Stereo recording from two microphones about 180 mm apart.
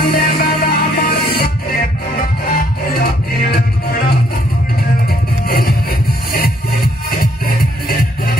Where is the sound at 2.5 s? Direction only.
60° left (ahead or behind).